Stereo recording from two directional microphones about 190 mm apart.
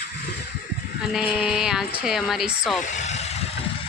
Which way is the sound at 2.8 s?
40° left (ahead or behind).